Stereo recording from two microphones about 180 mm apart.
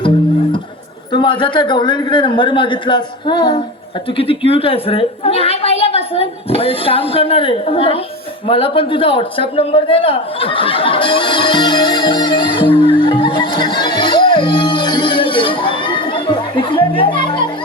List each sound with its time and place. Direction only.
1.1 s a man's voice: 25° left (ahead or behind)